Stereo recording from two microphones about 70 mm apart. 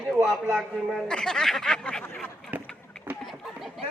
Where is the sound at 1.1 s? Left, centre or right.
Centre.